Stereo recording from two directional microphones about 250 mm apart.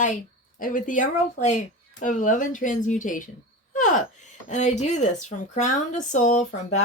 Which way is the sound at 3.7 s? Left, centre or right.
Left.